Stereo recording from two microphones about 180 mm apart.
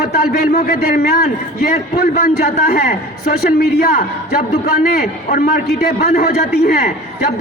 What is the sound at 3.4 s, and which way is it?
Speech, 60° left (ahead or behind).